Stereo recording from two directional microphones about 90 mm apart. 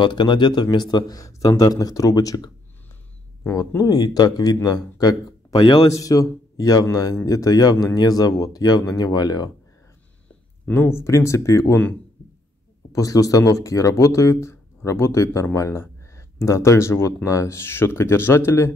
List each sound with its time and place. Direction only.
0.0 s speech: 60° left (ahead or behind)
3.5 s speech: 40° left (ahead or behind)
5.6 s a man's voice: 70° left (ahead or behind)
5.9 s speech: 40° left (ahead or behind)
10.7 s speech: 25° left (ahead or behind)
12.9 s speech: 40° left (ahead or behind)